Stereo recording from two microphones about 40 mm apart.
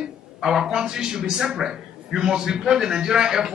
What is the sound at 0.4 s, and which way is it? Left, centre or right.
A man's voice, centre.